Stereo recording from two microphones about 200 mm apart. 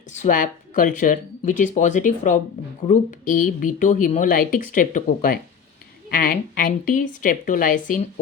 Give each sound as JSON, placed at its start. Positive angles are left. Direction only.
{"t": 0.1, "sound": "a woman's voice", "side_deg": 40}